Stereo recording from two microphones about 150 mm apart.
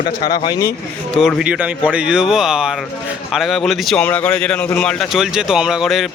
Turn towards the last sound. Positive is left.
turn(degrees=0)  # may be behind; listen again after turning